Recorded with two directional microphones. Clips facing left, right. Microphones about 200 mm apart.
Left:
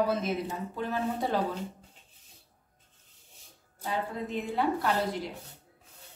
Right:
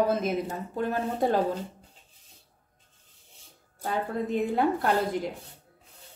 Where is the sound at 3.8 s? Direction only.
50° right (ahead or behind).